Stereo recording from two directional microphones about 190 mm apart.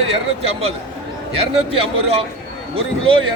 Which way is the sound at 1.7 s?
30° right (ahead or behind).